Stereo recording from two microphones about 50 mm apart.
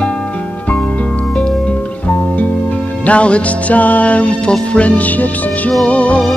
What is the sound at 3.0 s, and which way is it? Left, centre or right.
Music, left.